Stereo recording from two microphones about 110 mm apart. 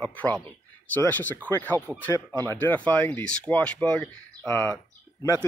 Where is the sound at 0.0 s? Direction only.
15° left (ahead or behind).